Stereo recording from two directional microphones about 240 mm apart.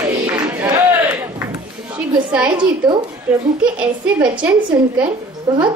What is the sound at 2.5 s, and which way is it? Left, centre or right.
Speech, centre.